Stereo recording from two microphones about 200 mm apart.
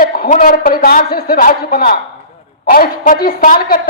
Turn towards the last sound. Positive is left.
turn(degrees=45)  # may be behind; listen again after turning